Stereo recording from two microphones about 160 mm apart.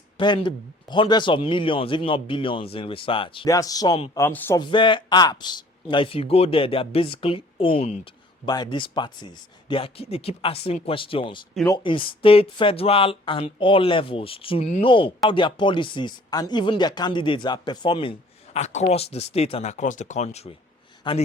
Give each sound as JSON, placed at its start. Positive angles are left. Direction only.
{"t": 0.2, "sound": "a man's voice", "side_deg": 30}
{"t": 3.5, "sound": "speech", "side_deg": 20}
{"t": 4.6, "sound": "a man's voice", "side_deg": 30}
{"t": 18.6, "sound": "speech", "side_deg": 45}
{"t": 21.0, "sound": "speech", "side_deg": 30}